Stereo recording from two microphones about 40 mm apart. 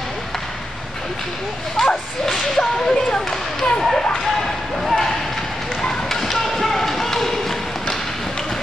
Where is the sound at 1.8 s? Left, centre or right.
Centre.